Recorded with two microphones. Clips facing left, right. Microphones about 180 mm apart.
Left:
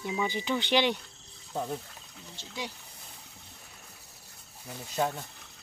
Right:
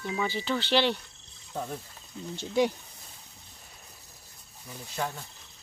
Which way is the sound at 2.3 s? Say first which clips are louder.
Right 14 dB; 55° right (ahead or behind).